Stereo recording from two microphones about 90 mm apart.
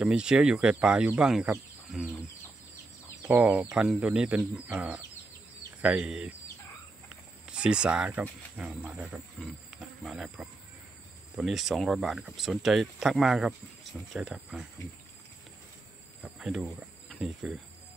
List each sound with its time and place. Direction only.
0.0 s speech: 10° right (ahead or behind)
3.3 s speech: 20° right (ahead or behind)
7.1 s cricket: 10° right (ahead or behind)
8.2 s speech: 15° right (ahead or behind)
9.4 s cricket: 5° right (ahead or behind)
11.3 s speech: centre (ahead or behind)
16.2 s speech: 5° right (ahead or behind)